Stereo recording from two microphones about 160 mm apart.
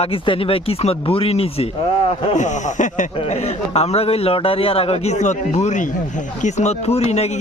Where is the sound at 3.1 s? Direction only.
40° left (ahead or behind).